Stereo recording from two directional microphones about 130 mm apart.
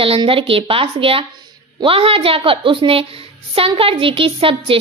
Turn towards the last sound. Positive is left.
turn(degrees=-45)  # may be behind; listen again after turning